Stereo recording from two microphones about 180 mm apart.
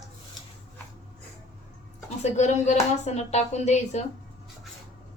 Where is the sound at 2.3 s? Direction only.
40° left (ahead or behind).